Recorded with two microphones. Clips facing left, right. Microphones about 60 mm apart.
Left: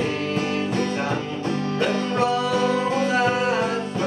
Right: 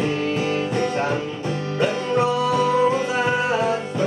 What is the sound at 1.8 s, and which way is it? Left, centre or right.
Music, centre.